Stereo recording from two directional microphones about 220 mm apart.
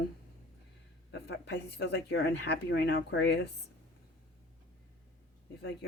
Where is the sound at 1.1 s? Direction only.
50° left (ahead or behind).